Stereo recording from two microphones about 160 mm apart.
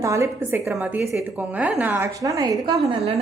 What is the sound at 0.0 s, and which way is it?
Speech, 20° right (ahead or behind).